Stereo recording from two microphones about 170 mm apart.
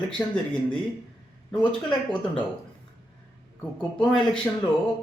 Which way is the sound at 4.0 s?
5° left (ahead or behind).